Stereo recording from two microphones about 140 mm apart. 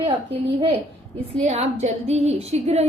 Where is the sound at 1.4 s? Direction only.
50° right (ahead or behind).